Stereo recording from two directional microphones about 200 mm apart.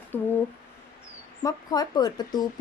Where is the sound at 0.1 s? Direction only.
10° left (ahead or behind).